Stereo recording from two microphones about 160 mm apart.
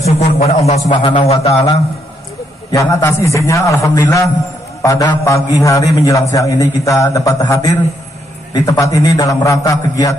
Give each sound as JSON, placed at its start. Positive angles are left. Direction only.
{"t": 0.0, "sound": "a man's voice", "side_deg": 40}
{"t": 2.7, "sound": "a man's voice", "side_deg": 20}